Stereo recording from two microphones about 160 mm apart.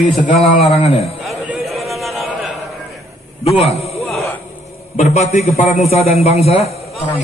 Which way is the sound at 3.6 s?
40° left (ahead or behind).